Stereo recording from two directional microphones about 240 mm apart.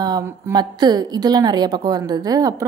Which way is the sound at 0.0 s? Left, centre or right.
Centre.